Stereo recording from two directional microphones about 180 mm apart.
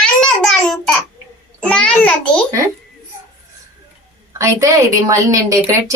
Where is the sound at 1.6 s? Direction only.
5° left (ahead or behind).